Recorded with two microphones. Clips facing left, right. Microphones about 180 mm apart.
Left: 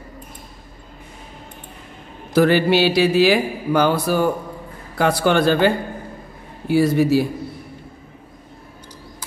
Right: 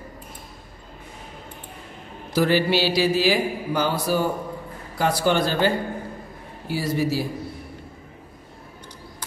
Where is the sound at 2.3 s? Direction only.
60° left (ahead or behind).